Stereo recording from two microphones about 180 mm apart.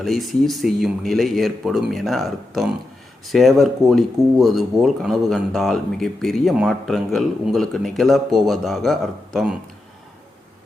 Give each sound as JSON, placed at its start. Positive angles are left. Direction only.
{"t": 0.0, "sound": "speech", "side_deg": 0}